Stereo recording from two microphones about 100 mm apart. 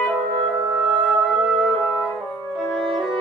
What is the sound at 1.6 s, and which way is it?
Music, centre (ahead or behind).